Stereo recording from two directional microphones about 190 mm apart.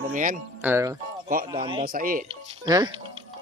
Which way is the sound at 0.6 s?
15° right (ahead or behind).